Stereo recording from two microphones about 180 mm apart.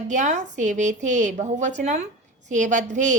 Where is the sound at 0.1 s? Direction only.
45° right (ahead or behind).